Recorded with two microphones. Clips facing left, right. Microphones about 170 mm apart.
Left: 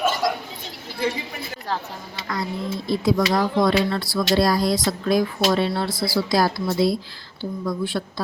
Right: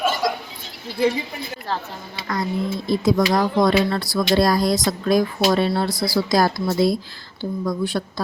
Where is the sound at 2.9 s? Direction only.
45° right (ahead or behind).